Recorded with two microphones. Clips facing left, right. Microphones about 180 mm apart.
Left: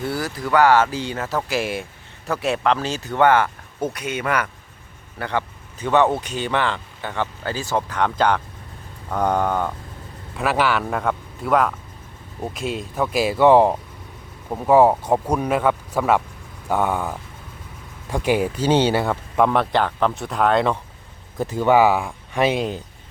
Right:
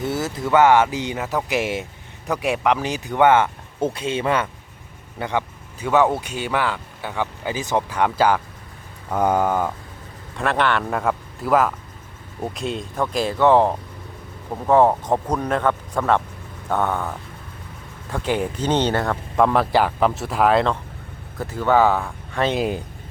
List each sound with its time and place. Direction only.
0.0 s speech: 20° right (ahead or behind)
5.2 s speech: 15° right (ahead or behind)
10.3 s a man's voice: 5° left (ahead or behind)
21.3 s speech: 15° left (ahead or behind)
22.5 s speech: 5° right (ahead or behind)